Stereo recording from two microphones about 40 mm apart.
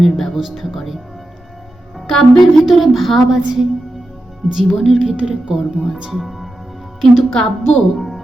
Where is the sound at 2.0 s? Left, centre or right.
Centre.